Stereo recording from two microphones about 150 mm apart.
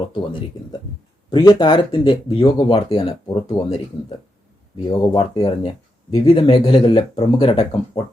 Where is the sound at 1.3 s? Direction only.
30° left (ahead or behind).